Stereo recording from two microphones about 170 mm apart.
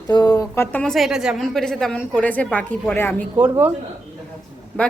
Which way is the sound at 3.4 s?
10° right (ahead or behind).